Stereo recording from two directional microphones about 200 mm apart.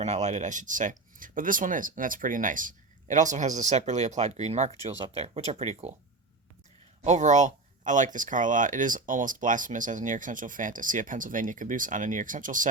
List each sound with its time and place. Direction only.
0.0 s speech: 35° right (ahead or behind)
7.0 s speech: 35° right (ahead or behind)